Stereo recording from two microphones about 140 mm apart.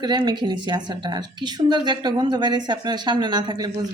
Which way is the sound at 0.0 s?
30° right (ahead or behind).